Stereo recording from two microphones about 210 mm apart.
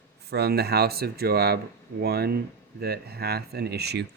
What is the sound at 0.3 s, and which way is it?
Speech, 50° right (ahead or behind).